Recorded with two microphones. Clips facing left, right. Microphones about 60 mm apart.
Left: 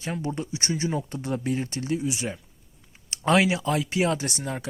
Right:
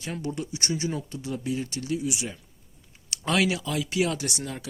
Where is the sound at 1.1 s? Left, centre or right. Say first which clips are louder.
Left 3 dB; left.